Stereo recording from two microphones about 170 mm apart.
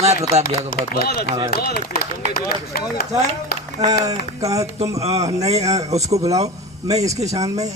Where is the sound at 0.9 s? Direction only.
65° left (ahead or behind).